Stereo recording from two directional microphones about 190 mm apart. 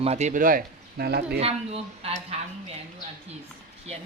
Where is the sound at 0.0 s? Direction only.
35° right (ahead or behind); by 1.4 s 55° right (ahead or behind).